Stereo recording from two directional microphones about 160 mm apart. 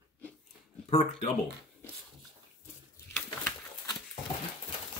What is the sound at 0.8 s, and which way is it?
Speech, 40° left (ahead or behind).